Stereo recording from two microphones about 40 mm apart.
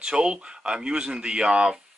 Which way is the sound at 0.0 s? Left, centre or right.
Right.